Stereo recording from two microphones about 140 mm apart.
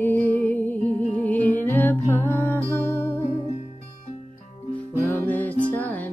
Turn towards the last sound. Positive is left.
turn(degrees=10)  # may be behind; listen again after turning